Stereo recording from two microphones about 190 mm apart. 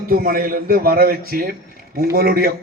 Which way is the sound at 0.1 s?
50° right (ahead or behind).